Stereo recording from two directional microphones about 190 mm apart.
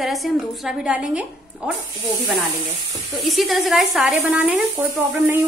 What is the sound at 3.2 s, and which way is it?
A woman's voice, centre (ahead or behind).